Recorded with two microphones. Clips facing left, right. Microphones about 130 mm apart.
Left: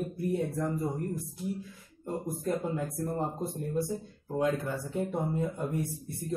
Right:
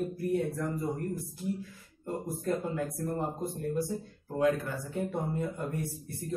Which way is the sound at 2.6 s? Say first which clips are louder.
Even; 25° left (ahead or behind).